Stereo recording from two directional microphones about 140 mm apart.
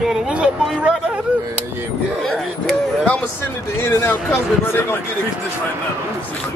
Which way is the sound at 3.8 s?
15° left (ahead or behind).